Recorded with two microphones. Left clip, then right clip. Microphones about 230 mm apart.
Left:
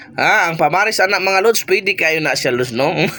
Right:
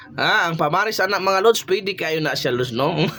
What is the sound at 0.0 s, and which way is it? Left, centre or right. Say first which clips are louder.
Speech: left 5 dB; centre.